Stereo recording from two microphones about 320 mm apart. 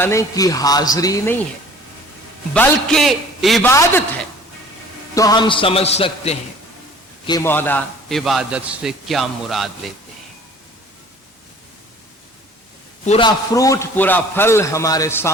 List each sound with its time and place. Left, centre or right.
0.0 s a man's voice: centre
2.5 s a man's voice: centre
13.1 s a man's voice: centre